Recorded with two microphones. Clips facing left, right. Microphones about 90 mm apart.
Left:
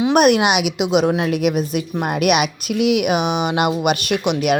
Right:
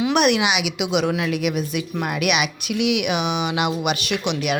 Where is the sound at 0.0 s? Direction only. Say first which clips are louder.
Left 5 dB; 40° left (ahead or behind).